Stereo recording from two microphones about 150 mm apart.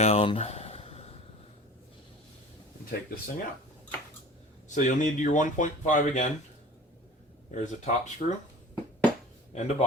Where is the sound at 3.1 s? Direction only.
80° left.